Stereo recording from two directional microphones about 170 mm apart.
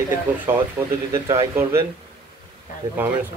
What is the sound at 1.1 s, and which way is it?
Speech, 15° right (ahead or behind).